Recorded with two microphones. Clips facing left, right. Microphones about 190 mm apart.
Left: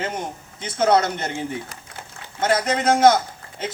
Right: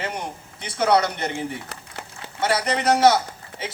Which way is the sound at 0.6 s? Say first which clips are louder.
Left 1 dB; 45° left (ahead or behind).